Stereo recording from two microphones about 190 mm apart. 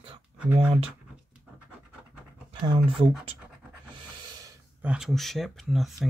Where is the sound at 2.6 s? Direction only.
30° right (ahead or behind).